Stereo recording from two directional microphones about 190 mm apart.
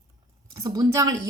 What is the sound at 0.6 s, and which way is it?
Speech, 20° right (ahead or behind).